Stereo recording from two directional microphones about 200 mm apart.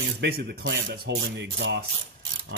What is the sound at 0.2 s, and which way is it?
Speech, 55° right (ahead or behind).